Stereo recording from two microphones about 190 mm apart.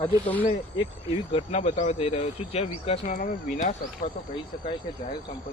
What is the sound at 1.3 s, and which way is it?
Speech, 35° left (ahead or behind).